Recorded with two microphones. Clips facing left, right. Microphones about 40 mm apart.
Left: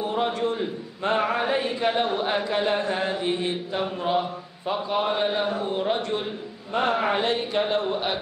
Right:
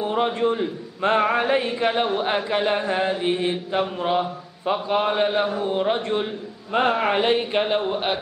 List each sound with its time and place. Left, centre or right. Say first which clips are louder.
0.0 s a man's voice: right 3 dB; right
1.0 s chant: right 4 dB; right
5.7 s a man's voice: right 3 dB; centre
6.7 s chant: right 3 dB; right